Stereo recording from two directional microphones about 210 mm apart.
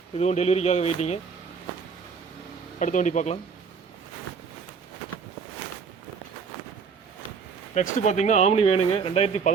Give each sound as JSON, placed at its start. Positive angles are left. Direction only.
{"t": 0.2, "sound": "speech", "side_deg": 30}
{"t": 2.7, "sound": "speech", "side_deg": 35}
{"t": 7.7, "sound": "speech", "side_deg": 35}